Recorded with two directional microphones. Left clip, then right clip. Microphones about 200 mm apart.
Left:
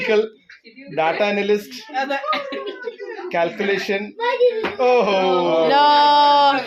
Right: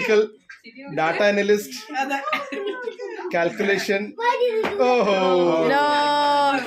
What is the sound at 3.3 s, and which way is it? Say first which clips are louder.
Speech: left 1 dB; 30° right (ahead or behind).